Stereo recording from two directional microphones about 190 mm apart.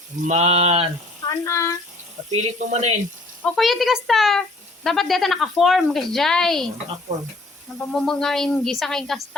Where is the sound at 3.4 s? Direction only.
Centre (ahead or behind).